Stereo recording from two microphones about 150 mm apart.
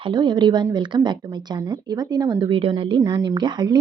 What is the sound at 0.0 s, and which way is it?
A woman's voice, 30° right (ahead or behind).